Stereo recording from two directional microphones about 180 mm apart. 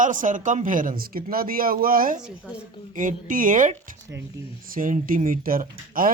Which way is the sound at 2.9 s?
45° right (ahead or behind).